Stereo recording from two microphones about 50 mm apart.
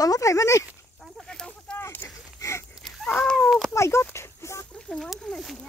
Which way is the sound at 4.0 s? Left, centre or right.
Left.